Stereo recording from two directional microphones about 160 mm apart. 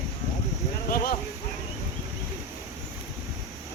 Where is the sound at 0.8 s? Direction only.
65° left (ahead or behind).